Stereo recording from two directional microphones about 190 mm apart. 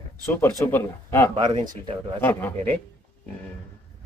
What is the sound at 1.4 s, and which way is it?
Speech, 20° right (ahead or behind).